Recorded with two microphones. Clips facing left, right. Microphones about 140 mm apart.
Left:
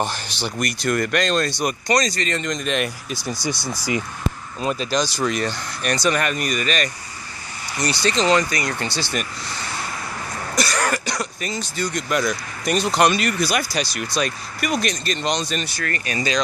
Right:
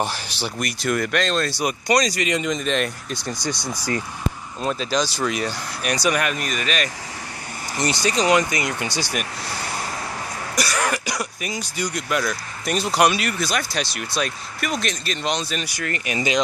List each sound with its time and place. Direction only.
0.0 s speech: 5° right (ahead or behind)
7.7 s speech: 20° right (ahead or behind)
10.5 s speech: 5° right (ahead or behind)
12.1 s speech: centre (ahead or behind); by 16.3 s 20° right (ahead or behind)